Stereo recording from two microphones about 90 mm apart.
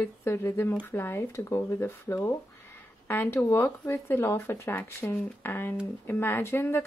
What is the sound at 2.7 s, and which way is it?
Speech, 20° left (ahead or behind).